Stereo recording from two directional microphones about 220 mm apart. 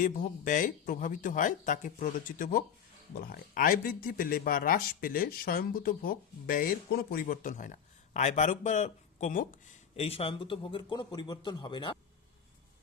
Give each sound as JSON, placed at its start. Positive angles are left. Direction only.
{"t": 0.0, "sound": "speech", "side_deg": 35}